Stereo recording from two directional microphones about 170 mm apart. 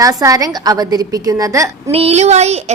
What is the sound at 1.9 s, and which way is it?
Speech, 40° right (ahead or behind).